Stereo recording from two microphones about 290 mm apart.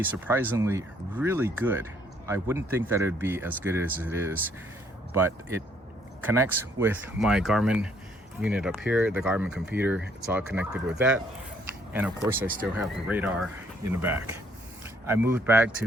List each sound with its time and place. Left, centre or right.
0.0 s speech: centre
15.0 s speech: centre